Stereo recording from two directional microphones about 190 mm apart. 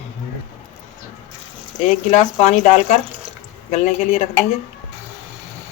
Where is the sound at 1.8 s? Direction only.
35° left (ahead or behind).